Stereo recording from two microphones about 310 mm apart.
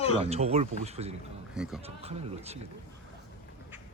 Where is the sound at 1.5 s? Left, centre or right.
Centre.